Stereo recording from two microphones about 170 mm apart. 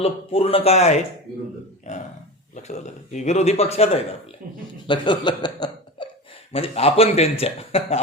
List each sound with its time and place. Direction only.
0.0 s a man's voice: 35° left (ahead or behind)
4.9 s a man's voice: 25° left (ahead or behind)